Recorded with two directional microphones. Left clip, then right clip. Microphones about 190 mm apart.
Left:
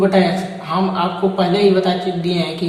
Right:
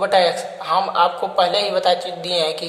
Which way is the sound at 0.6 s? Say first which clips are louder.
Right 3 dB; 35° right (ahead or behind).